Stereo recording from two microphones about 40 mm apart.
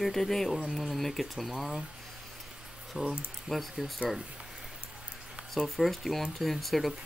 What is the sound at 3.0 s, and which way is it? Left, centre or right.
Speech, right.